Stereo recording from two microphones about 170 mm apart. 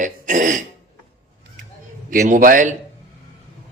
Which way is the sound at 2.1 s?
55° right (ahead or behind).